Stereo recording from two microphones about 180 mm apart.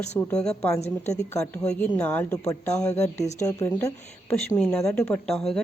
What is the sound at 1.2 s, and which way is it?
Speech, 15° left (ahead or behind).